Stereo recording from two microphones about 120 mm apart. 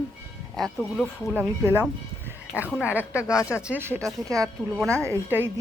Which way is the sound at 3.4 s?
25° left (ahead or behind).